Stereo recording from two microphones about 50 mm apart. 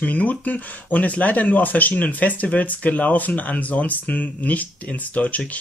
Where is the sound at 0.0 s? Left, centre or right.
Left.